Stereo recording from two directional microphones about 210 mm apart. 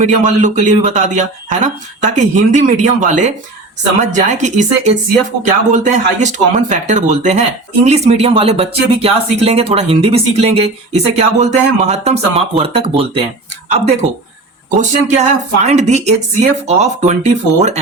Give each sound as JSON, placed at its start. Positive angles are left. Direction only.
{"t": 0.0, "sound": "speech", "side_deg": -35}